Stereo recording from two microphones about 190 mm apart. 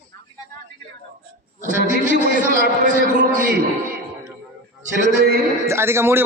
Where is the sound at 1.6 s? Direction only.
40° right (ahead or behind).